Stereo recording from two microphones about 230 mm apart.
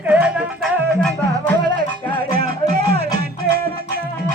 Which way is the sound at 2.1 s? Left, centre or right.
Right.